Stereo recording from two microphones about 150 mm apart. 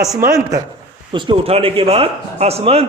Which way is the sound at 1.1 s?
30° right (ahead or behind).